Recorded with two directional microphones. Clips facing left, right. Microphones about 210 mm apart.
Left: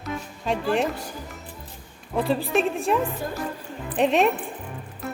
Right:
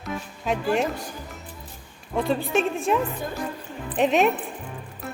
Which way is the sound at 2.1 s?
Centre (ahead or behind).